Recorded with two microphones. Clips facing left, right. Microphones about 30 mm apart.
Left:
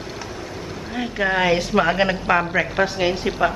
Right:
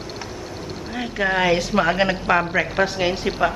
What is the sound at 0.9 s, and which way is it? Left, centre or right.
Speech, centre.